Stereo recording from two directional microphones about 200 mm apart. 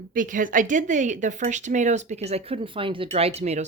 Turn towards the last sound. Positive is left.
turn(degrees=-35)  # may be behind; listen again after turning